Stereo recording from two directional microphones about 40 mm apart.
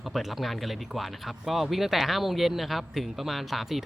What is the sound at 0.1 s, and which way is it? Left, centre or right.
Speech, centre.